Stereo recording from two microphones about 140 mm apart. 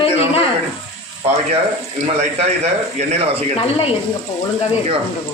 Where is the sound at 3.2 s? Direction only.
45° right (ahead or behind).